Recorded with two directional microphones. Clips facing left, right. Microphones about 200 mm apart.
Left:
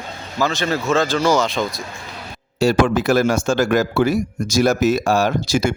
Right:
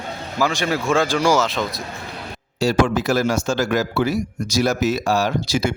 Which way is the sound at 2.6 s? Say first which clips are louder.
Left 2 dB; 55° left (ahead or behind).